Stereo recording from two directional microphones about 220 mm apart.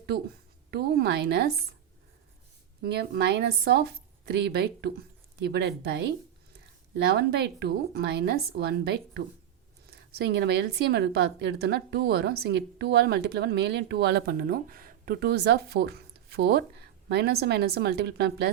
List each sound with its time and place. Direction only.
0.7 s a woman's voice: 45° right (ahead or behind)
2.8 s a woman's voice: 45° right (ahead or behind)
7.0 s a woman's voice: 50° right (ahead or behind)